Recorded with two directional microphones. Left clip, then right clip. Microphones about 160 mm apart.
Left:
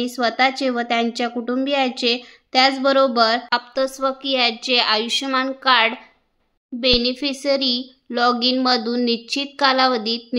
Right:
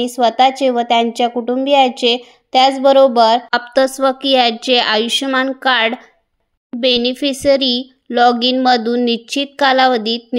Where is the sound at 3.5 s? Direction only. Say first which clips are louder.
Right 7 dB; 35° right (ahead or behind).